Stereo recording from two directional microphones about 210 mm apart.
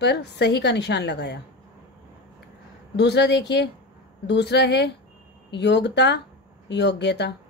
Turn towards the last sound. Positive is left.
turn(degrees=55)  # may be behind; listen again after turning